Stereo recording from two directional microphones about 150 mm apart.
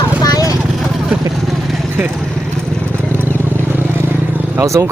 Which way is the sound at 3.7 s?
15° right (ahead or behind).